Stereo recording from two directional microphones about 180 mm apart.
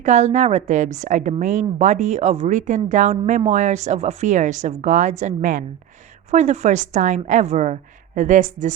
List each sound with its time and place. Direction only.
0.0 s a woman's voice: 40° right (ahead or behind)